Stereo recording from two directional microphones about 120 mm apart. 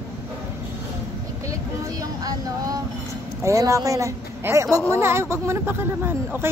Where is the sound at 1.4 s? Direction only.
25° right (ahead or behind).